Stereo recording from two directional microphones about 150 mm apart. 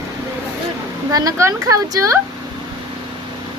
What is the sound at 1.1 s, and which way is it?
A woman's voice, 25° right (ahead or behind).